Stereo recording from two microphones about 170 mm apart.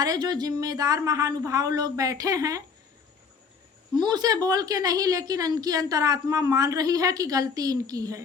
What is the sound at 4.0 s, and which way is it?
Speech, 25° right (ahead or behind).